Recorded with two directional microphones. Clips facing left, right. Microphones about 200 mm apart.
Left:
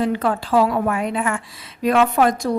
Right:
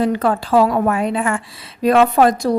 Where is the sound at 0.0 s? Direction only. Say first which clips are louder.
Right 3 dB; 40° right (ahead or behind).